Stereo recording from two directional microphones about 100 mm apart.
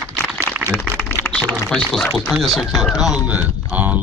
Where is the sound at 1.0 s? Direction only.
20° left (ahead or behind).